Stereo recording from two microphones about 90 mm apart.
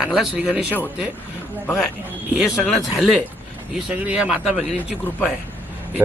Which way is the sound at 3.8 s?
15° right (ahead or behind).